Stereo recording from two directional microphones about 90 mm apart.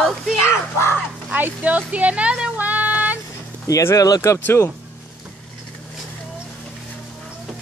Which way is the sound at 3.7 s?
35° left (ahead or behind).